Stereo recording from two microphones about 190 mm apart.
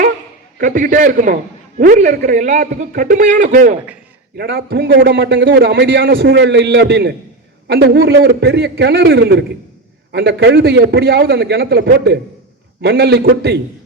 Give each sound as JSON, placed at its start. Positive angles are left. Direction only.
{"t": 0.6, "sound": "a man's voice", "side_deg": -45}
{"t": 4.4, "sound": "a man's voice", "side_deg": -55}